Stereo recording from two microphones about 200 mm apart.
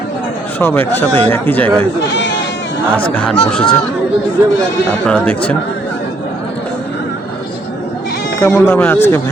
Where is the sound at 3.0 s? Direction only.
5° left (ahead or behind).